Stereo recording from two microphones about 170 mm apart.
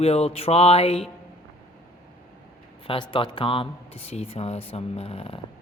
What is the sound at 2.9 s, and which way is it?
Speech, 30° left (ahead or behind).